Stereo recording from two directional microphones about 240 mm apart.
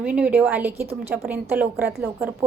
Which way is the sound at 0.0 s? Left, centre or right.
Centre.